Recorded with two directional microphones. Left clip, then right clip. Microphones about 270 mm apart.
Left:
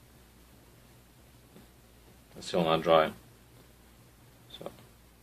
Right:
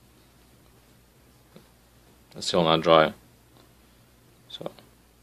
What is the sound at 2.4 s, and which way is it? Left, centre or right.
Speech, right.